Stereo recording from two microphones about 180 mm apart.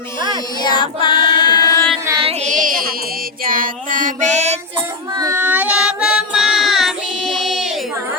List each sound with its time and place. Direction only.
0.6 s child singing: 25° left (ahead or behind)
2.0 s music: 25° right (ahead or behind)
2.4 s music: 45° right (ahead or behind)
3.4 s child singing: 50° right (ahead or behind)
5.1 s child singing: 15° right (ahead or behind)